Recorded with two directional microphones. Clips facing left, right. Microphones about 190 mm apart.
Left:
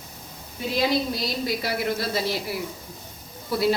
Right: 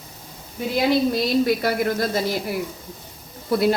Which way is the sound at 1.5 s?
50° right (ahead or behind).